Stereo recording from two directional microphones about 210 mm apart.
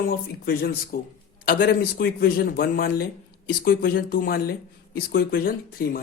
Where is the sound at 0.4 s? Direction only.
45° left (ahead or behind).